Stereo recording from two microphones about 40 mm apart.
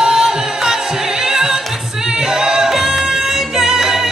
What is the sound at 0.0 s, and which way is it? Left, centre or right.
Music, centre.